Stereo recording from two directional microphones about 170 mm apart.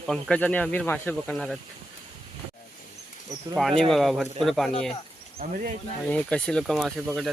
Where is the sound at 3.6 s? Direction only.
Centre (ahead or behind).